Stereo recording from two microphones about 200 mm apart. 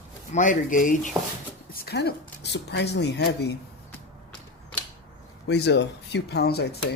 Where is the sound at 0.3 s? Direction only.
40° left (ahead or behind).